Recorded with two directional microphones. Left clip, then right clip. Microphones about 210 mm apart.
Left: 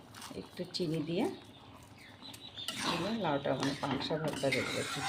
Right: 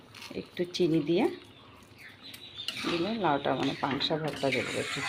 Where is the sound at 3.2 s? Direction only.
20° right (ahead or behind).